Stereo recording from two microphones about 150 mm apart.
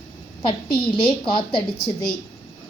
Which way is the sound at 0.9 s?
35° left (ahead or behind).